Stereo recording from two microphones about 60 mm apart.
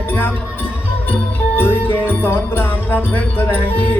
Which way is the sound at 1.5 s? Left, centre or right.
Left.